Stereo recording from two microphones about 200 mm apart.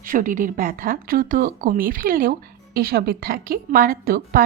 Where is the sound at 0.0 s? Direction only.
45° right (ahead or behind).